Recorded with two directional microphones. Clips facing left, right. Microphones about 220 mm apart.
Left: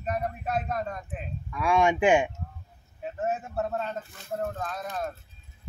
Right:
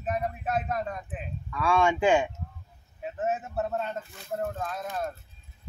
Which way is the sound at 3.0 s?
Centre (ahead or behind).